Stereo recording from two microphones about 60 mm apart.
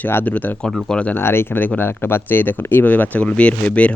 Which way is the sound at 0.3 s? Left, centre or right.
Left.